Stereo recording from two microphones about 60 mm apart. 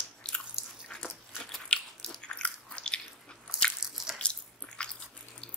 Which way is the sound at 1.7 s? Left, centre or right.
Centre.